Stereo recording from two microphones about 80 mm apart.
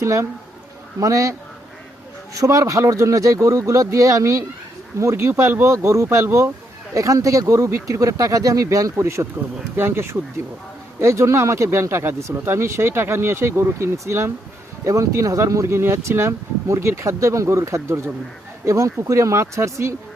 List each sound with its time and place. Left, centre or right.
0.0 s speech: right
9.7 s speech: right